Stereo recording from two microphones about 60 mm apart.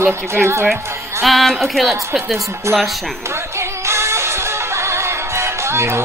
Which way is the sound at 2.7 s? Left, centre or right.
Right.